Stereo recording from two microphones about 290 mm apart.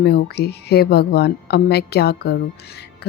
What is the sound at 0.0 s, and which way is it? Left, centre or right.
Speech, left.